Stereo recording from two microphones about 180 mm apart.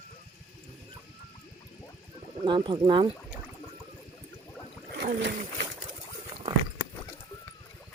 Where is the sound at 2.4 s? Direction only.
25° right (ahead or behind).